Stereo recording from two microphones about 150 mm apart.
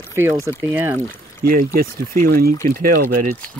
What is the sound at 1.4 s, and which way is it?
Speech, 75° right (ahead or behind).